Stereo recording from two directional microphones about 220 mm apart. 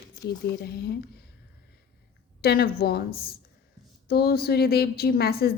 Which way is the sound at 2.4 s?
45° left (ahead or behind).